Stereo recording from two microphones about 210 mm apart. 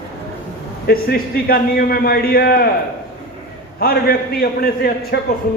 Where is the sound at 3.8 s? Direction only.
45° left (ahead or behind).